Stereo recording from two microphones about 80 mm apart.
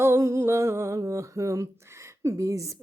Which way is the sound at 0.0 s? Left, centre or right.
Right.